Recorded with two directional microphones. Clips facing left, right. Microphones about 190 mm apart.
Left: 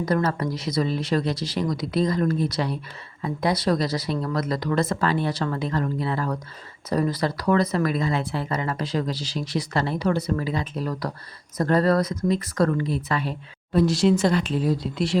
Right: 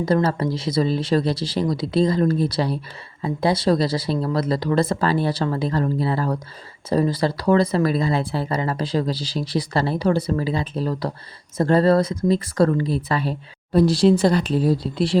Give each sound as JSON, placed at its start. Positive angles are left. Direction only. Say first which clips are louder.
{"t": 0.0, "sound": "speech", "louder": "right 4 dB", "side_deg": -30}